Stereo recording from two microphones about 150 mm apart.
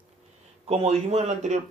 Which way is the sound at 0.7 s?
45° right (ahead or behind).